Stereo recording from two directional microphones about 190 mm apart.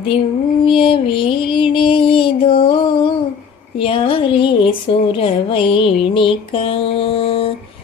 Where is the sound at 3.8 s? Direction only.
30° left (ahead or behind).